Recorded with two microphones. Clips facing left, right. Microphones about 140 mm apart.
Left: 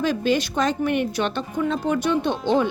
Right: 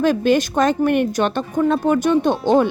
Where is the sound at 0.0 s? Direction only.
50° right (ahead or behind).